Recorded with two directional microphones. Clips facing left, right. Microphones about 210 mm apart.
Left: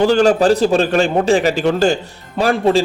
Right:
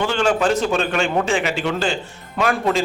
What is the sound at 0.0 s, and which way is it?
A man's voice, 40° left (ahead or behind).